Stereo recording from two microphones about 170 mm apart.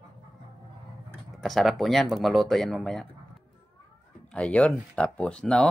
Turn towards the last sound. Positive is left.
turn(degrees=5)  # may be behind; listen again after turning